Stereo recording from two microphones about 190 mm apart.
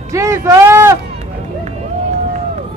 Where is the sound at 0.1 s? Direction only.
15° right (ahead or behind).